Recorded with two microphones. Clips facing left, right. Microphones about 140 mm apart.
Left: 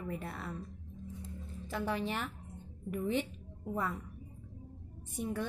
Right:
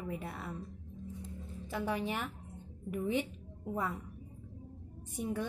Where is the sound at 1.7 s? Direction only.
10° right (ahead or behind).